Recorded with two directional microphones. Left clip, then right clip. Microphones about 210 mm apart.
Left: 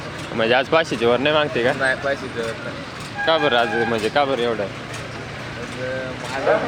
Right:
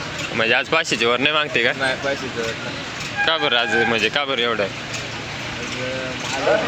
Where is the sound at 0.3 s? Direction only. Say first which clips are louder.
Left 1 dB; 10° left (ahead or behind); by 2.1 s 15° right (ahead or behind).